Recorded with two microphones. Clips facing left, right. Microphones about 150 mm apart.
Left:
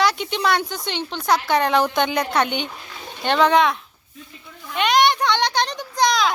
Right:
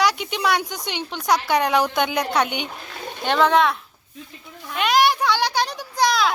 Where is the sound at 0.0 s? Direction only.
10° right (ahead or behind).